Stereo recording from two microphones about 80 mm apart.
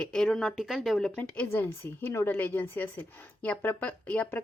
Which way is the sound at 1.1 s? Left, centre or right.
Centre.